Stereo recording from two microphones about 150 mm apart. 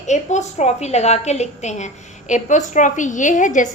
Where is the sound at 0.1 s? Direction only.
50° left (ahead or behind).